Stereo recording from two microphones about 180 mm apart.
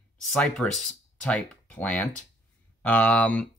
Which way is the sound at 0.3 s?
5° left (ahead or behind).